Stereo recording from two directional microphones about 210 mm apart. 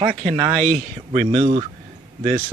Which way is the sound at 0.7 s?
30° right (ahead or behind).